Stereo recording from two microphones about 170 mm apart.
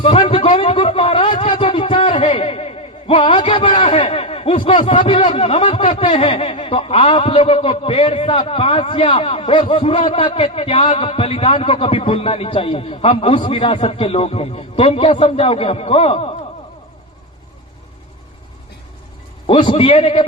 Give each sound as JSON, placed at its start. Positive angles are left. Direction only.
{"t": 0.0, "sound": "a sound", "side_deg": 35}
{"t": 3.8, "sound": "a man's voice", "side_deg": 30}
{"t": 19.5, "sound": "a man's voice", "side_deg": 30}